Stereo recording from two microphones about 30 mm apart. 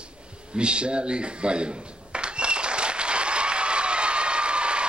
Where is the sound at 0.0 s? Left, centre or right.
Right.